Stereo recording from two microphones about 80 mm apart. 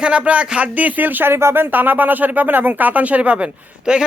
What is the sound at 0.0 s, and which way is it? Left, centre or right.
A man's voice, centre.